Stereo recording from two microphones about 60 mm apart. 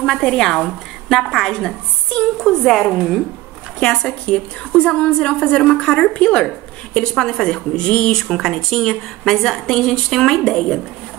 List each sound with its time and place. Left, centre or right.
0.0 s a woman's voice: centre
3.8 s a woman's voice: centre